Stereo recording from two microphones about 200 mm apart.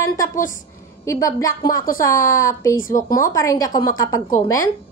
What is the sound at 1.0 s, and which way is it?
A woman's voice, 15° left (ahead or behind).